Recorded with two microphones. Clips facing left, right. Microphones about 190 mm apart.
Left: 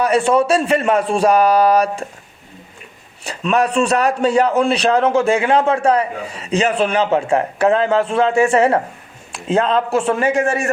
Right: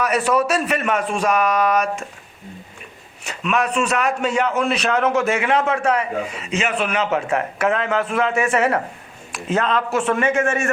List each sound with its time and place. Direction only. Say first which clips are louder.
0.0 s a man's voice: left 4 dB; 30° left (ahead or behind)
3.2 s a man's voice: left 4 dB; 35° left (ahead or behind)